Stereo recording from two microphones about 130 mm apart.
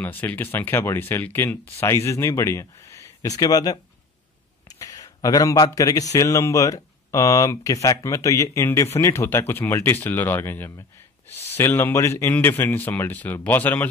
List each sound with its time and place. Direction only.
0.0 s speech: 15° left (ahead or behind)